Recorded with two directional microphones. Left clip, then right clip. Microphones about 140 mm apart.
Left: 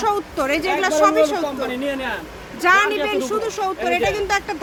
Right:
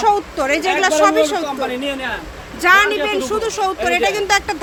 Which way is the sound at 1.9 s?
20° left (ahead or behind).